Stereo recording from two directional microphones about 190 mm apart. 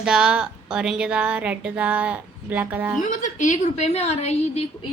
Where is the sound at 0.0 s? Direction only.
5° right (ahead or behind).